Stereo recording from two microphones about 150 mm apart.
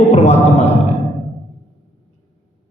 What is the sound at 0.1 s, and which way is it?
Music, 45° left (ahead or behind).